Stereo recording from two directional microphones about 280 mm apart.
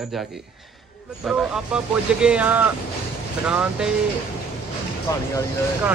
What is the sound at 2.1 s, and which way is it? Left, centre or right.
Speech, centre.